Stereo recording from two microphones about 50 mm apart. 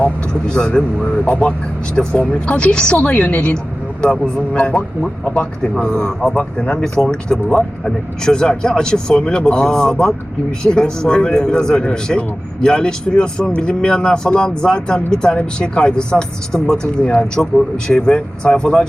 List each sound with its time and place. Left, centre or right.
0.0 s a woman's voice: centre